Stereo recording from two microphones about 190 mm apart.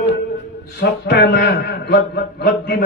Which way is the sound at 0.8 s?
60° left (ahead or behind).